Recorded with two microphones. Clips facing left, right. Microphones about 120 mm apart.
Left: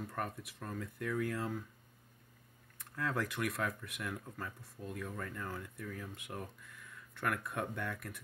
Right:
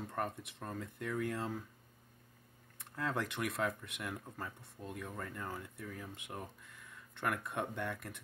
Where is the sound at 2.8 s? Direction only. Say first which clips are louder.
Left 1 dB; 25° right (ahead or behind).